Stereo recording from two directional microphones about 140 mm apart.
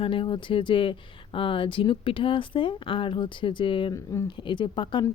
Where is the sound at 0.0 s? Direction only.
35° left (ahead or behind).